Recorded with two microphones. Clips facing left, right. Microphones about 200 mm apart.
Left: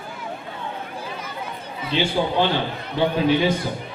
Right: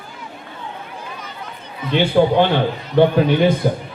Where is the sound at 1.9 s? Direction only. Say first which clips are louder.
Right 7 dB; 55° right (ahead or behind).